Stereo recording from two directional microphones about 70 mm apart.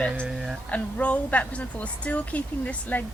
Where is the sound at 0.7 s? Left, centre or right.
Left.